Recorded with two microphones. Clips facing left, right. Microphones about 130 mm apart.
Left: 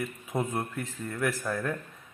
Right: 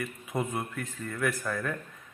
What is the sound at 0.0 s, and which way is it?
Speech, centre (ahead or behind).